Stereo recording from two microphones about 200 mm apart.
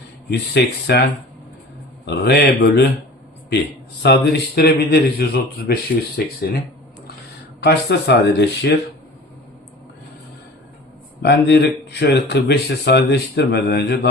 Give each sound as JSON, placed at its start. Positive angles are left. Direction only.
{"t": 0.3, "sound": "speech", "side_deg": 55}
{"t": 2.0, "sound": "speech", "side_deg": 55}
{"t": 4.0, "sound": "speech", "side_deg": 55}
{"t": 7.6, "sound": "speech", "side_deg": 55}
{"t": 11.2, "sound": "speech", "side_deg": 55}